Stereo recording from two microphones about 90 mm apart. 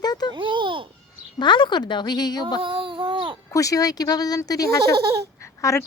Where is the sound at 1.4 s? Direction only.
60° left (ahead or behind).